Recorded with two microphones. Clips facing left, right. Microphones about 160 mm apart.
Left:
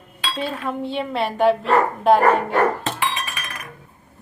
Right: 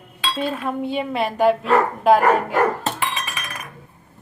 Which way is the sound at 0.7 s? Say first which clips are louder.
Right 1 dB; 10° right (ahead or behind).